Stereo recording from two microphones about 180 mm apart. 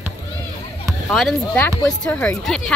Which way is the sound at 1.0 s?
5° left (ahead or behind).